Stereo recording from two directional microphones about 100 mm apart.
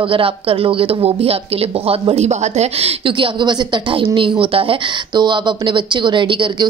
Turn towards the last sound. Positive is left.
turn(degrees=-55)  # may be behind; listen again after turning